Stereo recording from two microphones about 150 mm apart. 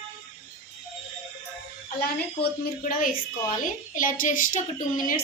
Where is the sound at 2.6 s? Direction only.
65° left (ahead or behind).